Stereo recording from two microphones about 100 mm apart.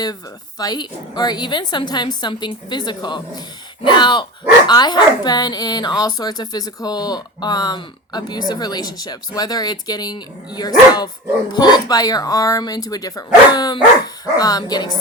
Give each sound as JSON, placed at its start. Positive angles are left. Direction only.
{"t": 0.6, "sound": "speech", "side_deg": 45}